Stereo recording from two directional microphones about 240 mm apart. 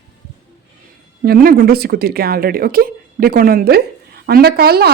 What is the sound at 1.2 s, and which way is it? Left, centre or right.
Speech, right.